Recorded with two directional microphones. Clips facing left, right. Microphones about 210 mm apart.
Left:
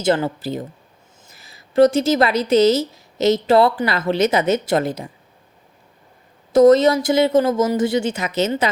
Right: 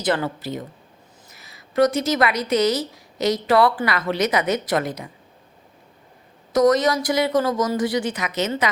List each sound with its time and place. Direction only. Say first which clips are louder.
0.0 s a woman's voice: left 4 dB; 25° left (ahead or behind)
6.5 s a woman's voice: left 6 dB; 30° left (ahead or behind)